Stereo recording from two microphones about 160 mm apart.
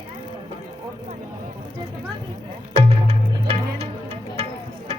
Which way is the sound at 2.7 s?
35° right (ahead or behind).